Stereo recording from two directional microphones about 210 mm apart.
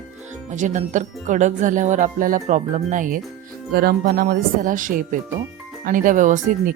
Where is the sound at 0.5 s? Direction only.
35° right (ahead or behind).